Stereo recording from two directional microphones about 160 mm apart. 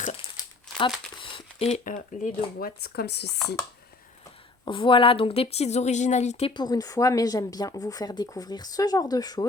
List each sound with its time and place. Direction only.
0.0 s crumpling: 40° left (ahead or behind)
1.2 s a sound: 35° left (ahead or behind)
1.8 s speech: 55° left (ahead or behind); by 3.3 s 90° left
4.6 s a woman's voice: 30° left (ahead or behind)
6.5 s a woman's voice: 25° left (ahead or behind)